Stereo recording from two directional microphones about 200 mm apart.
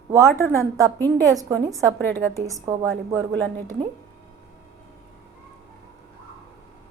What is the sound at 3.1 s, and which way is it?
Speech, 80° right.